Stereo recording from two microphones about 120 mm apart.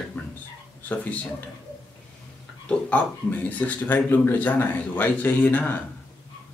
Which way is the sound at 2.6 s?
10° left (ahead or behind).